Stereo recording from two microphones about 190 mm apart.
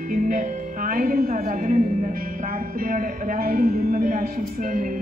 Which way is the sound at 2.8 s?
45° right (ahead or behind).